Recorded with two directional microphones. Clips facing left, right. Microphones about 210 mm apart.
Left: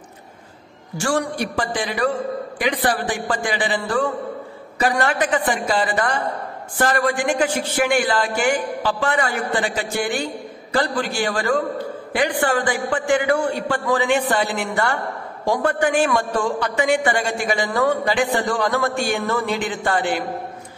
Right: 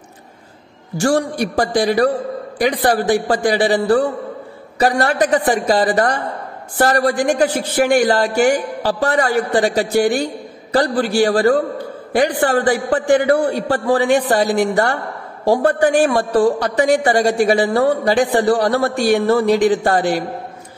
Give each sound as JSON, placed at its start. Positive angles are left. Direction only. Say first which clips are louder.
{"t": 0.9, "sound": "speech", "louder": "right 5 dB", "side_deg": -40}